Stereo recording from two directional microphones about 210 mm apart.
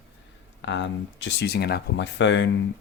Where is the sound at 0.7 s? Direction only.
60° left (ahead or behind).